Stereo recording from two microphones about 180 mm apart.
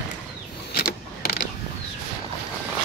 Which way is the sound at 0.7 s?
55° left (ahead or behind).